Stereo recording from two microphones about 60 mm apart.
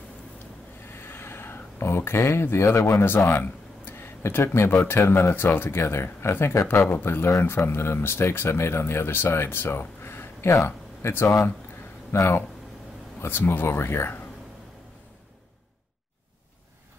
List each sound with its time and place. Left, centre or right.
0.9 s a sound: left
4.6 s speech: left
13.5 s speech: left